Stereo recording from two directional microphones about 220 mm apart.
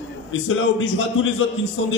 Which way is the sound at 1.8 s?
65° left (ahead or behind).